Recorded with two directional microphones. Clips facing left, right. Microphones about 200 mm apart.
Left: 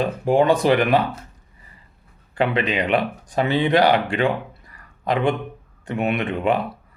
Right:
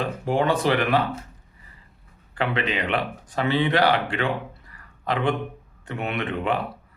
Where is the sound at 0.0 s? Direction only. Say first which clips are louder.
Left 5 dB; 15° left (ahead or behind).